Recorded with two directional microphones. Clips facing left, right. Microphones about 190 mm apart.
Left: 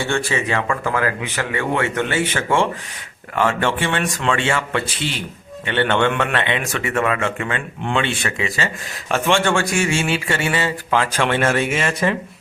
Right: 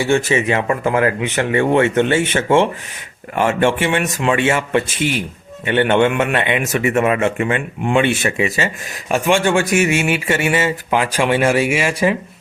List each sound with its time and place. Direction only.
0.0 s speech: 20° right (ahead or behind)